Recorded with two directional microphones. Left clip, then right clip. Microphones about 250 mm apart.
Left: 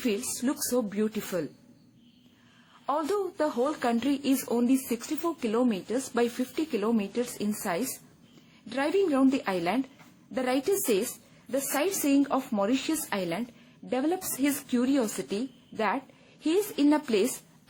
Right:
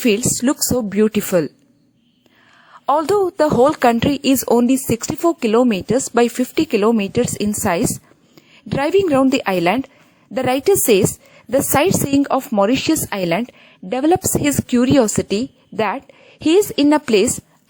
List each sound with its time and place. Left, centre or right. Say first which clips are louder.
0.0 s speech: right 13 dB; right
2.8 s speech: right 13 dB; right